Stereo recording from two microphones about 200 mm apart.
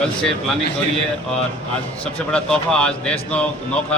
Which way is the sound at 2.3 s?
5° left (ahead or behind).